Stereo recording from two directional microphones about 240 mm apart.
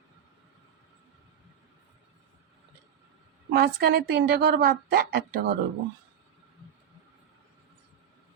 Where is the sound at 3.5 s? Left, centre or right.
Right.